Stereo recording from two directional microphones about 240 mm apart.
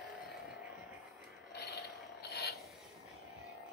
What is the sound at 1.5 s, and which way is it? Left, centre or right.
Mechanisms, left.